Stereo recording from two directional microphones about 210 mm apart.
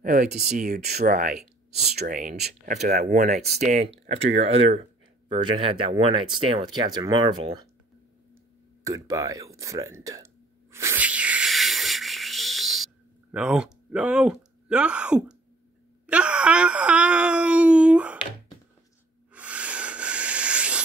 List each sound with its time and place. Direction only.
0.0 s speech: 40° right (ahead or behind); by 7.6 s 20° right (ahead or behind)
8.8 s speech: 15° right (ahead or behind)
10.7 s a sound: 10° right (ahead or behind)
16.1 s wail: 5° right (ahead or behind)
19.3 s sanding: 5° right (ahead or behind)